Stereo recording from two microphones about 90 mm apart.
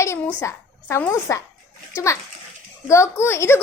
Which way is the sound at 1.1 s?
35° left (ahead or behind).